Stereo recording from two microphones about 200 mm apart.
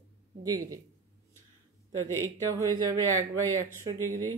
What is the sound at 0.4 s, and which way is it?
Speech, 20° right (ahead or behind).